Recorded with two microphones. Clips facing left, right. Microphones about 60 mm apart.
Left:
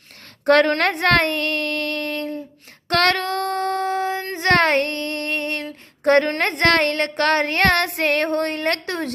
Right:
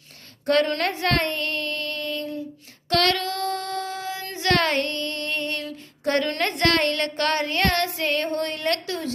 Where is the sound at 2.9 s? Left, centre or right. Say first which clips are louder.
Left 3 dB; left.